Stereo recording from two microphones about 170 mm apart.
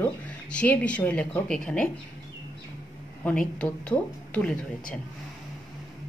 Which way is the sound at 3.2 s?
5° left (ahead or behind).